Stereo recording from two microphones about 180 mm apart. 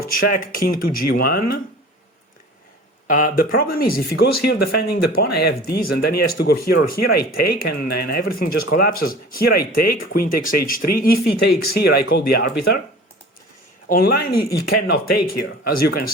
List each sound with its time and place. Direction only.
0.0 s speech: 50° left (ahead or behind)
3.1 s speech: 50° left (ahead or behind)
13.8 s speech: 55° left (ahead or behind)